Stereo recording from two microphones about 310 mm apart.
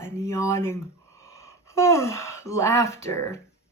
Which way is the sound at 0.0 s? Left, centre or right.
Centre.